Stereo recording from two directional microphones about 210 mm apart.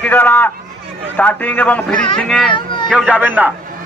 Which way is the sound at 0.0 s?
5° left (ahead or behind).